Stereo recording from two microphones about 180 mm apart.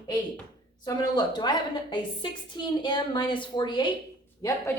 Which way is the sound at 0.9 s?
25° left (ahead or behind).